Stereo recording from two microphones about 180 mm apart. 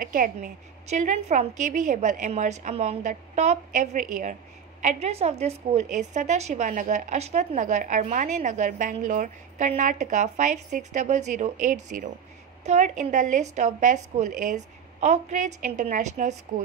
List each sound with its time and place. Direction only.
0.0 s a woman's voice: 50° right (ahead or behind)